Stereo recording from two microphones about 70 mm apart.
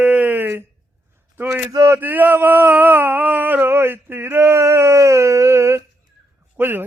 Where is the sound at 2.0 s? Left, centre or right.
Right.